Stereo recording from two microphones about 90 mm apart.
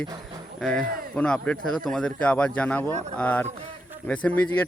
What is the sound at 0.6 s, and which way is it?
Speech, 10° left (ahead or behind).